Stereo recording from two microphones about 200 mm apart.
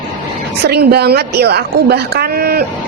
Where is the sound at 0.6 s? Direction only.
55° right (ahead or behind).